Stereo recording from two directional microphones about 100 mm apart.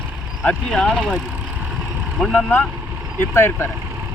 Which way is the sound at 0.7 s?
10° left (ahead or behind).